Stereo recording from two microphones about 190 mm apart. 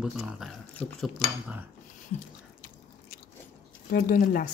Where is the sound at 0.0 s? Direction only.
Centre (ahead or behind).